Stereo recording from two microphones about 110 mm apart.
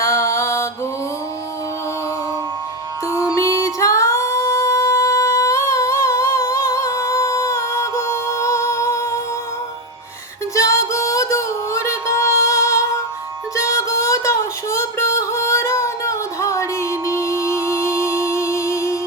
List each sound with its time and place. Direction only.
0.0 s mantra: 25° left (ahead or behind)
3.1 s music: 30° left (ahead or behind)
10.5 s music: 30° left (ahead or behind)